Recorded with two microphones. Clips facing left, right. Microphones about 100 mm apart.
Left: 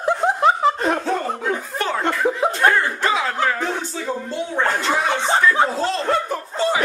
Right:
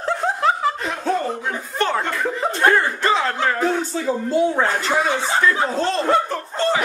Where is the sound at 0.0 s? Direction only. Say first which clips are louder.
Left 3 dB; 20° left (ahead or behind).